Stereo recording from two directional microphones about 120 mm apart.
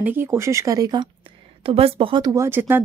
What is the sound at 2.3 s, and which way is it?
Speech, 20° right (ahead or behind).